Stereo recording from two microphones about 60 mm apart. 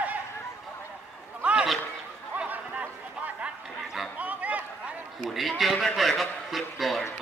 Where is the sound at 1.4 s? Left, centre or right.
Centre.